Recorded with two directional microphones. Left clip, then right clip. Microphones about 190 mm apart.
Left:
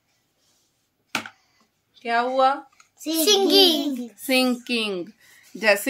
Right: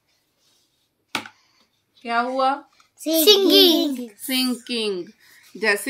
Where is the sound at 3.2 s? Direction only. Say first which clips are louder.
Right 2 dB; 25° right (ahead or behind).